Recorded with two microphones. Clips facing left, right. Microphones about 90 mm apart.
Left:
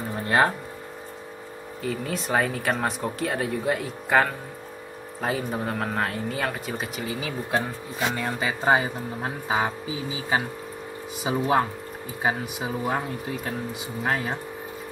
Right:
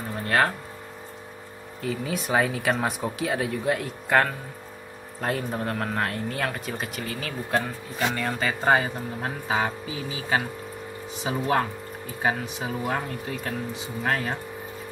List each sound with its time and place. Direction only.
0.1 s music: 20° left (ahead or behind)
1.8 s speech: centre (ahead or behind)